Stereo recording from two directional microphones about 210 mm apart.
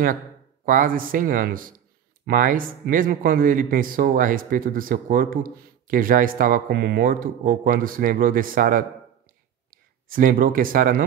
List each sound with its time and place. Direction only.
0.7 s speech: 40° right (ahead or behind)